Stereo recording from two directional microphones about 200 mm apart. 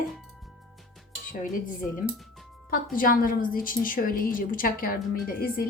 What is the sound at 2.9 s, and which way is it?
A woman's voice, 45° left (ahead or behind).